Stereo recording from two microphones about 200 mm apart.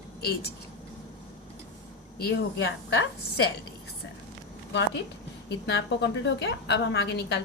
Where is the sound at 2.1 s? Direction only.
55° left (ahead or behind).